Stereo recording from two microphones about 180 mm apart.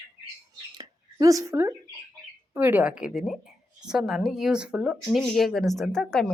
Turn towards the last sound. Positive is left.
turn(degrees=5)  # may be behind; listen again after turning